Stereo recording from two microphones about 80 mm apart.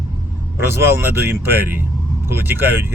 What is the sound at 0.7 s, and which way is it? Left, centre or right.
Speech, right.